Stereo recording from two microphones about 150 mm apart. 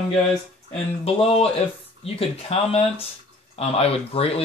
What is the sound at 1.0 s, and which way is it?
Speech, 40° left (ahead or behind).